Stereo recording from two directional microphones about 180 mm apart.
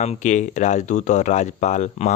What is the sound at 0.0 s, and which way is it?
Speech, 40° left (ahead or behind).